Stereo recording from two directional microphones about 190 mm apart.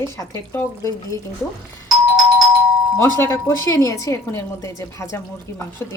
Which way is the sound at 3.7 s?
15° left (ahead or behind).